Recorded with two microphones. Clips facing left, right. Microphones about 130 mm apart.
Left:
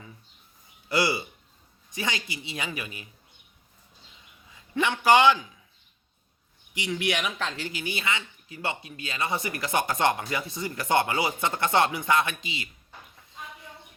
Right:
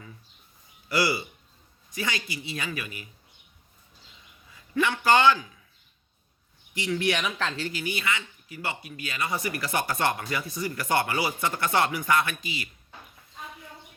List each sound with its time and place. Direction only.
0.9 s speech: 20° left (ahead or behind)
4.5 s a man's voice: 20° left (ahead or behind)
6.7 s speech: 15° left (ahead or behind)